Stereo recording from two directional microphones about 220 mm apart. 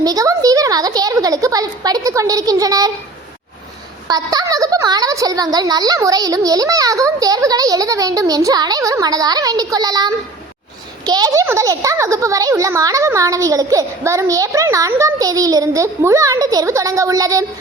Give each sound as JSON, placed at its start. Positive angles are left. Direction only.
{"t": 0.0, "sound": "a child's voice", "side_deg": -15}
{"t": 4.1, "sound": "a child's voice", "side_deg": -15}